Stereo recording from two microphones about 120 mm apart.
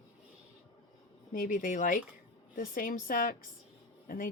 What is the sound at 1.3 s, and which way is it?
Speech, 90° left.